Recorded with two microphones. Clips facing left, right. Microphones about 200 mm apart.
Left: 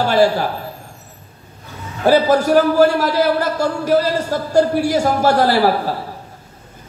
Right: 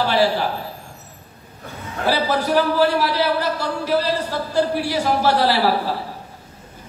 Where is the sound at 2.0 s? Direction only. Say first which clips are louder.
Left 7 dB; 45° left (ahead or behind).